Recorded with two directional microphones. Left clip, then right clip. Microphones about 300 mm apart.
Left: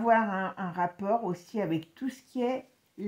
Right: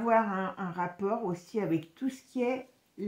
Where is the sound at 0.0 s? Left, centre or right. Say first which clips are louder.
Left 2 dB; left.